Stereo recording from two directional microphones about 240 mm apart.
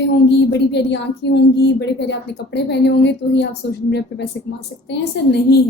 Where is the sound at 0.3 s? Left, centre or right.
Left.